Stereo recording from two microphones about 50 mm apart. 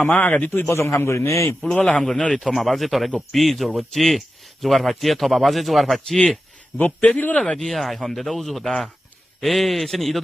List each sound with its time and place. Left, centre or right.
0.0 s a man's voice: left
0.5 s a man's voice: left
2.0 s a man's voice: centre
6.1 s a man's voice: centre
6.7 s a man's voice: left
7.6 s speech: centre